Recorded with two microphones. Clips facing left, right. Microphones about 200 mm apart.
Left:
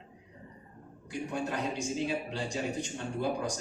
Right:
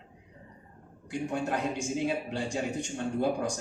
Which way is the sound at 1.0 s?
55° right (ahead or behind).